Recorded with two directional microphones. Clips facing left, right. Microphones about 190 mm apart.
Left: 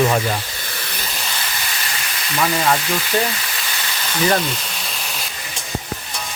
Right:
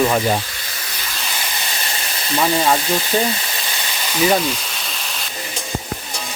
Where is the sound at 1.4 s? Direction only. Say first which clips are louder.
Right 1 dB; 25° right (ahead or behind).